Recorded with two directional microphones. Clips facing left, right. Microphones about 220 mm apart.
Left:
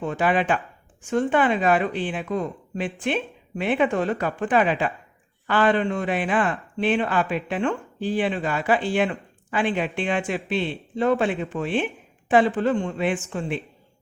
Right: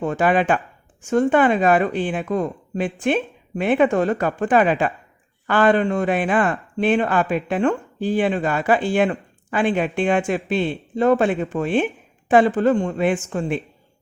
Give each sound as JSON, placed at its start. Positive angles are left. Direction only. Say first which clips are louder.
{"t": 0.0, "sound": "speech", "louder": "right 4 dB", "side_deg": -45}